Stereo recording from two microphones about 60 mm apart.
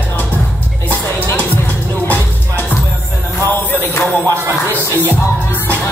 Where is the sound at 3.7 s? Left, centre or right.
Left.